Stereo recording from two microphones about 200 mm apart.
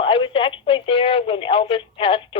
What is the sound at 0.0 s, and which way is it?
Speech, 25° left (ahead or behind).